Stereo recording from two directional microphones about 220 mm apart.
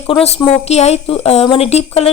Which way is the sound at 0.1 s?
25° left (ahead or behind).